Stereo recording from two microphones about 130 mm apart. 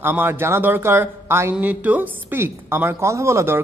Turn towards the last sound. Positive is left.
turn(degrees=-20)  # may be behind; listen again after turning